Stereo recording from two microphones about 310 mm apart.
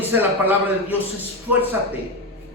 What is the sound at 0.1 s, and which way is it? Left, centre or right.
Speech, centre.